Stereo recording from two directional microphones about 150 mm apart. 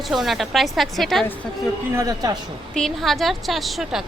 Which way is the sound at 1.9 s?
20° right (ahead or behind).